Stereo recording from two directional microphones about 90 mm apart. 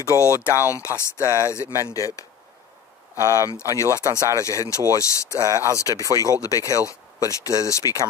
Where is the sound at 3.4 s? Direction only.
35° left (ahead or behind).